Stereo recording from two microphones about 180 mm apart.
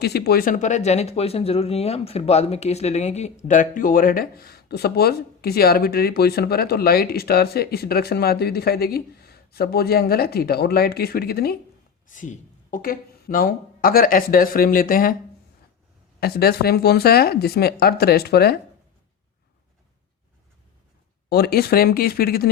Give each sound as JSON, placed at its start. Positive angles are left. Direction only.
{"t": 0.0, "sound": "speech", "side_deg": 60}
{"t": 12.0, "sound": "speech", "side_deg": 45}
{"t": 16.2, "sound": "speech", "side_deg": 60}
{"t": 21.2, "sound": "speech", "side_deg": 60}